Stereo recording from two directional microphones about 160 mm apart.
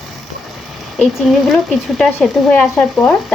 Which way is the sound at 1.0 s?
Centre (ahead or behind).